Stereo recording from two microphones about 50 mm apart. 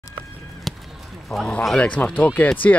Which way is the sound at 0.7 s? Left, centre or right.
Centre.